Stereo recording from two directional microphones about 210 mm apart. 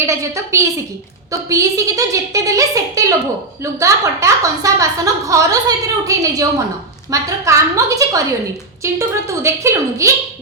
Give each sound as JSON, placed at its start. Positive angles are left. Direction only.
{"t": 0.0, "sound": "a woman's voice", "side_deg": -15}